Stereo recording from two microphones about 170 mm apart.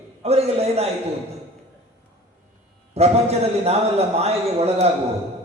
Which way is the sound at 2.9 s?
35° right (ahead or behind).